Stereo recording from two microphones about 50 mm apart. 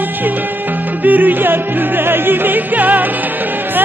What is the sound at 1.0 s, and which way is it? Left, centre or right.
Music, right.